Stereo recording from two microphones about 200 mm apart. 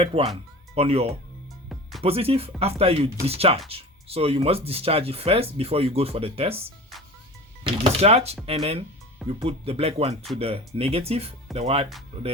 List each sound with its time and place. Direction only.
0.0 s speech: 30° right (ahead or behind)
1.7 s music: centre (ahead or behind)
2.0 s speech: 30° right (ahead or behind)
7.6 s speech: 30° right (ahead or behind)